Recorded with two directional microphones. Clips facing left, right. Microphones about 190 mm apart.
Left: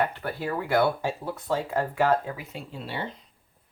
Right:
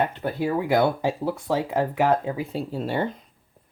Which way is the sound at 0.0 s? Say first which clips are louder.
Right 4 dB; 20° right (ahead or behind).